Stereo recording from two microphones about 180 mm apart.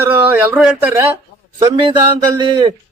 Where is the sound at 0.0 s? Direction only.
10° right (ahead or behind).